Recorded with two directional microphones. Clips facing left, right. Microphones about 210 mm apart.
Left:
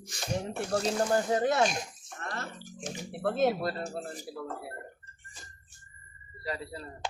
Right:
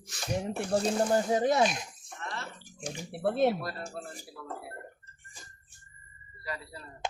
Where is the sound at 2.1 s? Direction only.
45° left (ahead or behind).